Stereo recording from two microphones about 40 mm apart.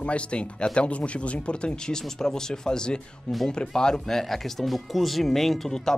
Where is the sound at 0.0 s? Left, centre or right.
Left.